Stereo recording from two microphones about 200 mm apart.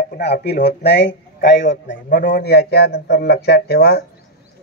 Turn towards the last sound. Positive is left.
turn(degrees=55)  # may be behind; listen again after turning